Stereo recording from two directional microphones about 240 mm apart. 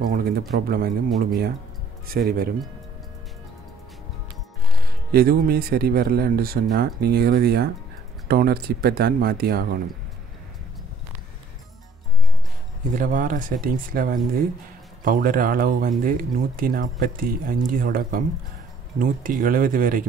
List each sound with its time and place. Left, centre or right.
0.0 s speech: right
5.1 s speech: right
12.9 s speech: right